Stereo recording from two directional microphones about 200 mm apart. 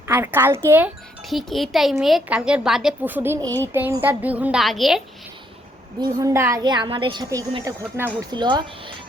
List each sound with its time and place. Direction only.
0.1 s a woman's voice: 10° right (ahead or behind)
1.3 s a woman's voice: centre (ahead or behind)
6.0 s a woman's voice: 15° right (ahead or behind)